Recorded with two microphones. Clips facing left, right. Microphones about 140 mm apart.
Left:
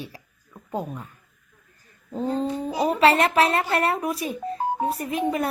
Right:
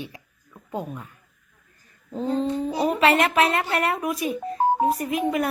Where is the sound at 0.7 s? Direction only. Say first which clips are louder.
Left 1 dB; centre (ahead or behind).